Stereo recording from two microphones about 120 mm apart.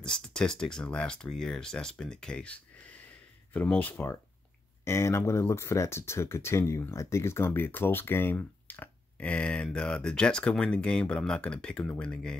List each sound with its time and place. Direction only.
0.0 s speech: 5° left (ahead or behind)